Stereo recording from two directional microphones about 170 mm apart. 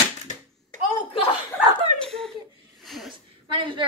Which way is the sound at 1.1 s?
30° left (ahead or behind).